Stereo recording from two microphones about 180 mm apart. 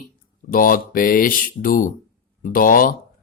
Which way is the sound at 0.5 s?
50° left (ahead or behind).